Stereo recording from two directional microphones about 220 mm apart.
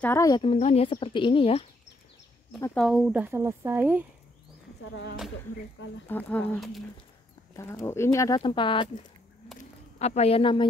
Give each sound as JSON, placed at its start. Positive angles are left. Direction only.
{"t": 0.0, "sound": "speech", "side_deg": 15}
{"t": 2.6, "sound": "speech", "side_deg": 5}
{"t": 6.0, "sound": "speech", "side_deg": 10}
{"t": 9.9, "sound": "speech", "side_deg": 30}